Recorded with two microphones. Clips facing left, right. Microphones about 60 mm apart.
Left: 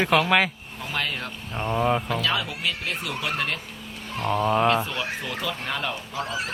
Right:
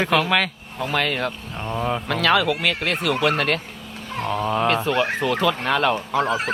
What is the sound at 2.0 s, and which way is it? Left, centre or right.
Speech, right.